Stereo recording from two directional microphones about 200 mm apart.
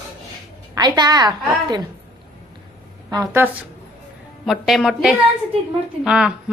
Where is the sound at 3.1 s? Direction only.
20° right (ahead or behind).